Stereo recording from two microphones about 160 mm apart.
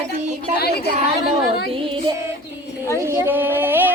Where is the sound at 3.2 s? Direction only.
10° right (ahead or behind).